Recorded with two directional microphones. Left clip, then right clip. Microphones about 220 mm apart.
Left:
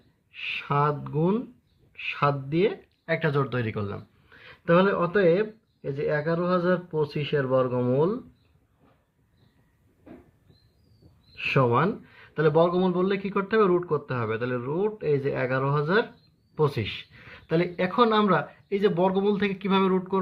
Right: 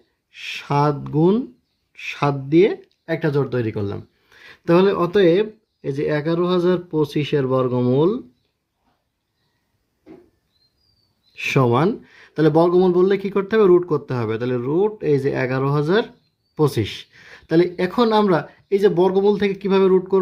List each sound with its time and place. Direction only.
0.3 s speech: 45° right (ahead or behind)
11.3 s speech: 45° right (ahead or behind)